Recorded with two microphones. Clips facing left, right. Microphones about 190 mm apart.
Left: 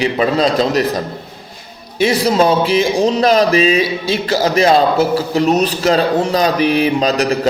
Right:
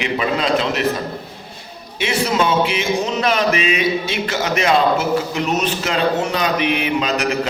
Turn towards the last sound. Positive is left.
turn(degrees=35)  # may be behind; listen again after turning